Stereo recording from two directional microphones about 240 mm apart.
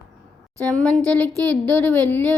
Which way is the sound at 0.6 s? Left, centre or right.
Centre.